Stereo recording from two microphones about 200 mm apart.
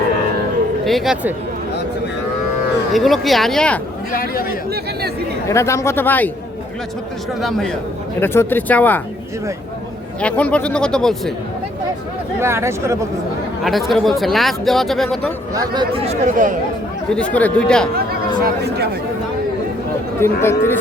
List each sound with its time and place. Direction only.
0.9 s speech: centre (ahead or behind)
2.9 s speech: centre (ahead or behind)
4.1 s speech: 45° left (ahead or behind)
5.5 s a man's voice: 15° left (ahead or behind)
7.4 s a man's voice: centre (ahead or behind)
10.2 s speech: 5° left (ahead or behind)
12.4 s speech: 15° right (ahead or behind)
13.7 s speech: centre (ahead or behind)
15.5 s speech: 20° right (ahead or behind)
16.2 s speech: 40° right (ahead or behind)
17.2 s speech: 5° left (ahead or behind)
17.9 s speech: 50° right (ahead or behind)
20.1 s a man's voice: 10° left (ahead or behind)